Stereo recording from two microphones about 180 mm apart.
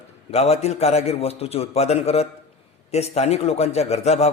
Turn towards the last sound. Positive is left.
turn(degrees=35)  # may be behind; listen again after turning